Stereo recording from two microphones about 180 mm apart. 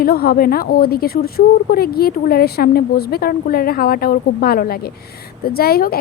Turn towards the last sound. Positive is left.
turn(degrees=55)  # may be behind; listen again after turning